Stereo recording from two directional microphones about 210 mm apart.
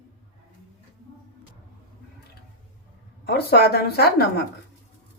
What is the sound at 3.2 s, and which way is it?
Speech, 50° left (ahead or behind).